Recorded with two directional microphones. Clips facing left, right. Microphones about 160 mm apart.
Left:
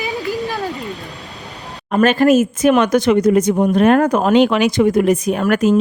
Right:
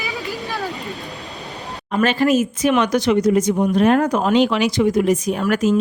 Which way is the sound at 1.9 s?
50° left (ahead or behind).